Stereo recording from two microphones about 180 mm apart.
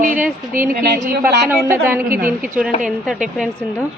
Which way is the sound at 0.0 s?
45° right (ahead or behind).